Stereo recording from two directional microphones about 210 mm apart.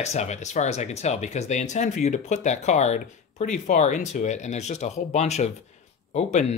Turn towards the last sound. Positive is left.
turn(degrees=30)  # may be behind; listen again after turning